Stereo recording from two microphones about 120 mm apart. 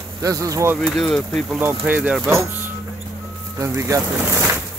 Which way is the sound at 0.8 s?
5° left (ahead or behind).